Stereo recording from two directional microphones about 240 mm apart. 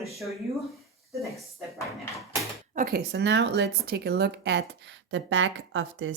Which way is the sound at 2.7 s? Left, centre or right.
Right.